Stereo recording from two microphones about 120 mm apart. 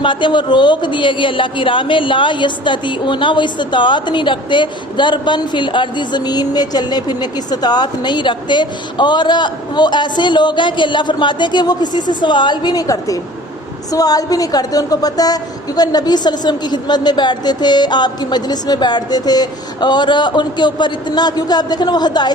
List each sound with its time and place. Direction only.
0.0 s speech: 40° left (ahead or behind)